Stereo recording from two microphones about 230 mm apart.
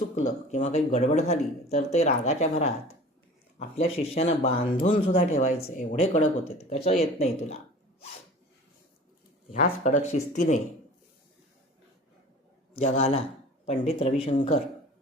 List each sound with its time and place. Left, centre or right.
0.5 s speech: left
9.5 s speech: left
12.7 s speech: left